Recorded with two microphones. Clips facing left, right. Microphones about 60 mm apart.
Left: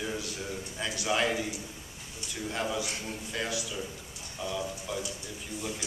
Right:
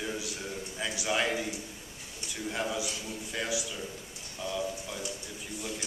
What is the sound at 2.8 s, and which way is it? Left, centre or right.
Speech, left.